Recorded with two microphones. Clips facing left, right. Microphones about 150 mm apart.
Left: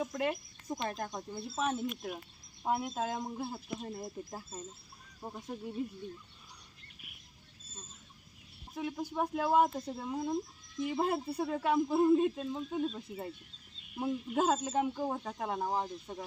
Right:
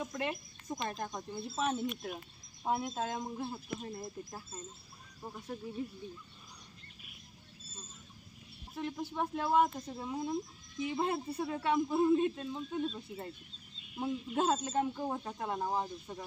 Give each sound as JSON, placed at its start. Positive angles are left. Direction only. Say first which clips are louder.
{"t": 0.0, "sound": "speech", "louder": "left 3 dB", "side_deg": 5}
{"t": 8.7, "sound": "speech", "louder": "left 2 dB", "side_deg": 10}